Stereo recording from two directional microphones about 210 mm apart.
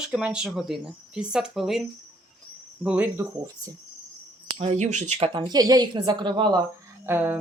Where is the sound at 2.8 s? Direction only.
5° right (ahead or behind).